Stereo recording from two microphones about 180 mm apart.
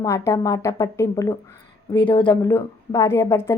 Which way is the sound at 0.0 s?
15° left (ahead or behind).